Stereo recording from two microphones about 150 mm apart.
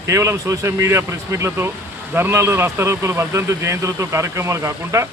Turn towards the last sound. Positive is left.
turn(degrees=-20)  # may be behind; listen again after turning